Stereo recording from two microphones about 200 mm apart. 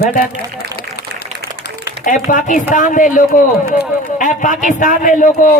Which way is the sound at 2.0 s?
40° left (ahead or behind).